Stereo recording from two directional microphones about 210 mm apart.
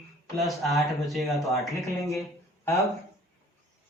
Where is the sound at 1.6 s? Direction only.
15° left (ahead or behind).